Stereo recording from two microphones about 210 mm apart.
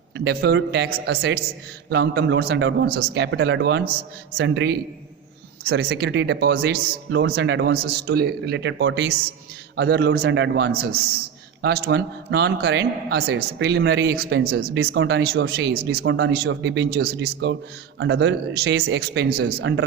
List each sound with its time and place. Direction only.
0.3 s a man's voice: 55° right (ahead or behind)